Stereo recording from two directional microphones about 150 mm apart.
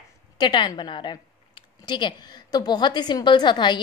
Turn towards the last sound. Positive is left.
turn(degrees=30)  # may be behind; listen again after turning